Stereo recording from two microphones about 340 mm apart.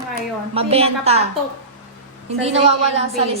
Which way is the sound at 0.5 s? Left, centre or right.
Centre.